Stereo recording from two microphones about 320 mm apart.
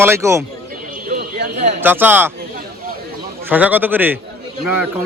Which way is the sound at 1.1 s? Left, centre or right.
Right.